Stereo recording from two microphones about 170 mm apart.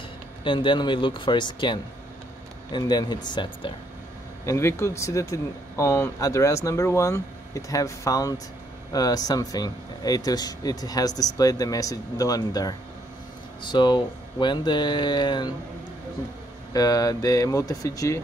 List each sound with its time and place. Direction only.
0.4 s speech: 30° left (ahead or behind)
4.5 s speech: 15° left (ahead or behind)
16.7 s speech: 20° left (ahead or behind)